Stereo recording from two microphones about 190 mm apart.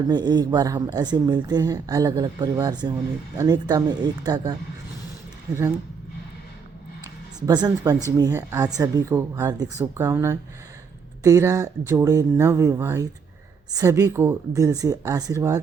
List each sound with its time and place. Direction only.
0.1 s speech: 20° right (ahead or behind)
7.3 s speech: 20° right (ahead or behind)